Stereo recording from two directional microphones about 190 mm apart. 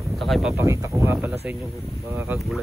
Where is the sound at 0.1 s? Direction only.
Centre (ahead or behind).